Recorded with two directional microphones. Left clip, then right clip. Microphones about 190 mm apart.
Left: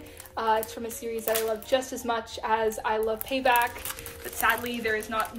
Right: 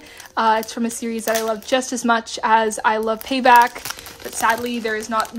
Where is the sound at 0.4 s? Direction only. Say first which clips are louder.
Right 8 dB; 45° right (ahead or behind).